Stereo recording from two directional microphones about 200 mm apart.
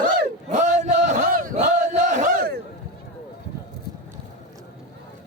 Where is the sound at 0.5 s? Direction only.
40° right (ahead or behind).